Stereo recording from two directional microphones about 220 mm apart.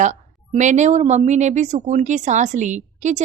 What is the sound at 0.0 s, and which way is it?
A woman's voice, 35° right (ahead or behind).